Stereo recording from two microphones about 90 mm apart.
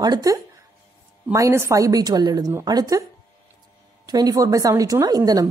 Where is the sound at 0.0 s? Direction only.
45° right (ahead or behind).